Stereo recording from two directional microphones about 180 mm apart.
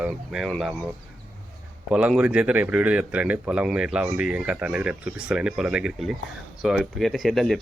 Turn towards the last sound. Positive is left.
turn(degrees=0)  # may be behind; listen again after turning